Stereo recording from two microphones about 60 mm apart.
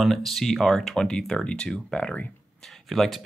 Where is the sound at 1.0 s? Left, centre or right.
Centre.